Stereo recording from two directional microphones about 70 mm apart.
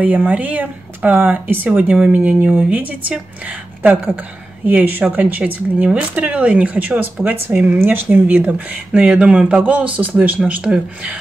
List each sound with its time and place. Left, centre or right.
0.0 s speech: right
10.4 s speech: centre